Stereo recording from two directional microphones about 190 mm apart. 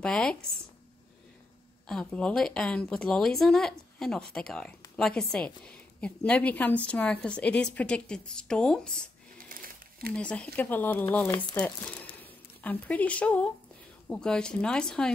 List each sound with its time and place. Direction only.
0.0 s speech: 5° left (ahead or behind)
1.9 s speech: 5° left (ahead or behind)
9.4 s a sound: 50° right (ahead or behind)
10.1 s speech: 5° left (ahead or behind)